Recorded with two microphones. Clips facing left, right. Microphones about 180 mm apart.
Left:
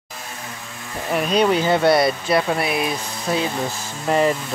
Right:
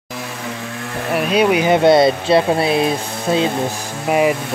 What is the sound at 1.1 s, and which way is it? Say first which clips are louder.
Speech: right 3 dB; 5° right (ahead or behind).